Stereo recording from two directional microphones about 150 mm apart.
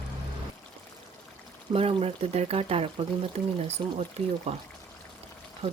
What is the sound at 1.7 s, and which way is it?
Speech, 40° right (ahead or behind).